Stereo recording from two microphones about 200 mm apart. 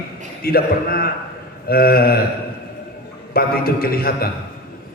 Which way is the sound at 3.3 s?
50° left (ahead or behind).